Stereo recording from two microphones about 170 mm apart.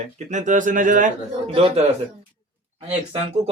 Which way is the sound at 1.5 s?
35° right (ahead or behind).